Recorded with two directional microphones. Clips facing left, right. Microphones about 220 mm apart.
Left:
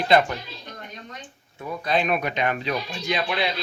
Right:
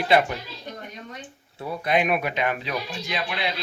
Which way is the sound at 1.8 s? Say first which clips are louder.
Right 1 dB; 15° right (ahead or behind).